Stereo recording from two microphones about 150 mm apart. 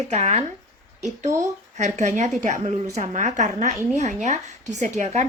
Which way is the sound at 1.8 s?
50° right (ahead or behind).